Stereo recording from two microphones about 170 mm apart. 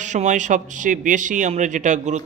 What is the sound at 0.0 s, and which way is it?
Speech, 45° right (ahead or behind).